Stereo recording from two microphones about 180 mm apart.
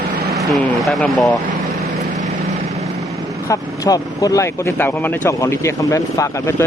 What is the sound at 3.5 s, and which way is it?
Speech, 20° left (ahead or behind).